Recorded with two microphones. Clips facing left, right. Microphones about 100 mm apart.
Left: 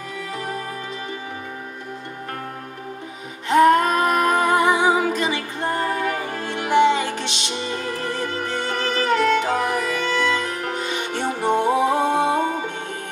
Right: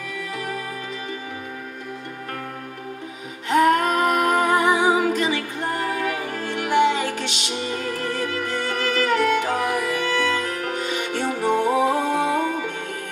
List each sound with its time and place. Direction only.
3.4 s music: 25° left (ahead or behind)